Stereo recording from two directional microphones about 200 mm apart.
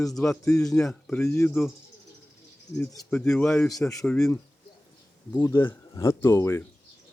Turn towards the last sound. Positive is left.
turn(degrees=15)  # may be behind; listen again after turning